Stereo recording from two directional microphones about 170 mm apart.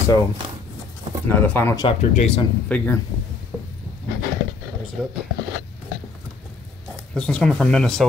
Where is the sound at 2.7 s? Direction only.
10° left (ahead or behind).